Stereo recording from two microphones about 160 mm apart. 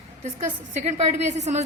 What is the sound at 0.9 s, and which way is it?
Speech, 45° right (ahead or behind).